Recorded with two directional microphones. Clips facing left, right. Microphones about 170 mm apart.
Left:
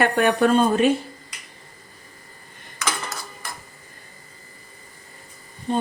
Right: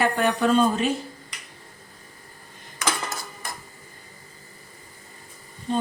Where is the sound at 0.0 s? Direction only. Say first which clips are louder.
Left 3 dB; 60° left (ahead or behind).